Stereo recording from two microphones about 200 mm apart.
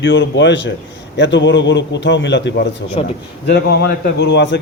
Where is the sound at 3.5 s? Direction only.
55° left (ahead or behind).